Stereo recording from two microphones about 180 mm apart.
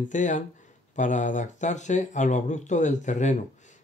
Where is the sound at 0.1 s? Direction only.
45° left (ahead or behind).